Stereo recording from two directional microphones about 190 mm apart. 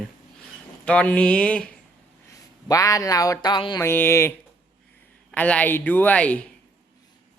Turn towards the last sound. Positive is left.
turn(degrees=5)  # may be behind; listen again after turning